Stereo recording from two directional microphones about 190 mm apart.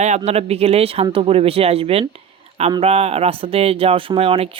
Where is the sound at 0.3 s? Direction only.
30° right (ahead or behind).